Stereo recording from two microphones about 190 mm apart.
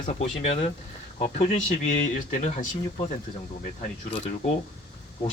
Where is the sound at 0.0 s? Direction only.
35° left (ahead or behind).